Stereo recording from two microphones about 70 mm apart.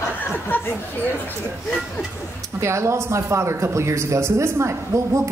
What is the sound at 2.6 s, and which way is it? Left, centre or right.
Speech, right.